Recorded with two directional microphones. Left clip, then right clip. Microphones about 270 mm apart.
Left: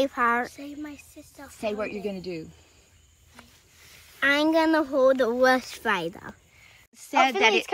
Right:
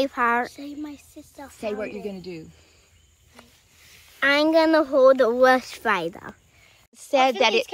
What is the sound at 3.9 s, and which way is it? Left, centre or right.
Speech, centre.